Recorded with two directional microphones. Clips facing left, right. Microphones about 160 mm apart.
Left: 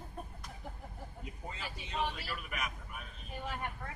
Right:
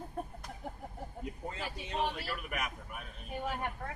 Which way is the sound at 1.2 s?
50° right (ahead or behind).